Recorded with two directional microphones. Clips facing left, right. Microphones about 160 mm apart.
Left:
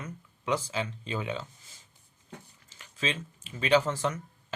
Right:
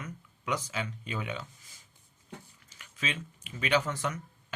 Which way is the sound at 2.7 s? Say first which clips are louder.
Left 4 dB; 30° left (ahead or behind).